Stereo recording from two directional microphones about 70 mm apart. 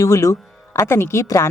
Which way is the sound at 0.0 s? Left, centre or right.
Left.